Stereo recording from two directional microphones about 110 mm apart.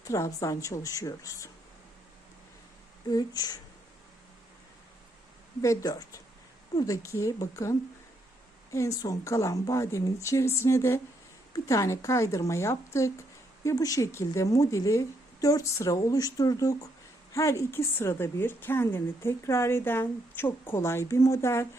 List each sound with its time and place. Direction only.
0.1 s a woman's voice: 30° left (ahead or behind)
3.1 s a woman's voice: 35° left (ahead or behind)
5.6 s a woman's voice: 30° left (ahead or behind)